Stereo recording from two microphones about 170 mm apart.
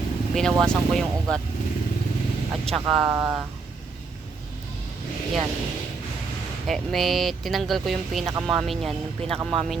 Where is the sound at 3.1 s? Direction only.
10° right (ahead or behind).